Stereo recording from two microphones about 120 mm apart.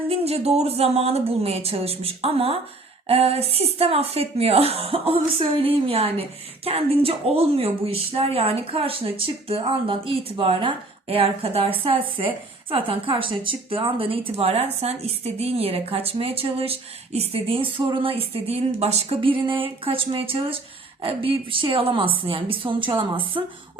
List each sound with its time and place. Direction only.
0.1 s a woman's voice: 60° right (ahead or behind)